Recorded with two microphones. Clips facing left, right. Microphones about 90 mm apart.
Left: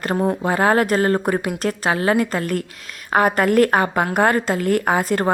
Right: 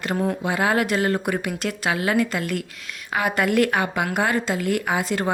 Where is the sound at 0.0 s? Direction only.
45° left (ahead or behind).